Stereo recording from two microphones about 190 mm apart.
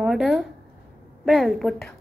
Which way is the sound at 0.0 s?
Centre (ahead or behind).